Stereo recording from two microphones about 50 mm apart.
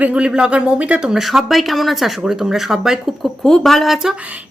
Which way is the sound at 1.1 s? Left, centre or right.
Centre.